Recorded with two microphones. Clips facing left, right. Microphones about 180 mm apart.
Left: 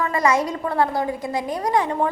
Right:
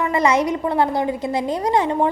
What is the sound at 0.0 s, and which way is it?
A woman's voice, 20° right (ahead or behind).